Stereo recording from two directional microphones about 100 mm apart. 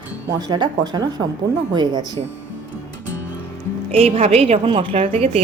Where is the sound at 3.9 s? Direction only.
80° right.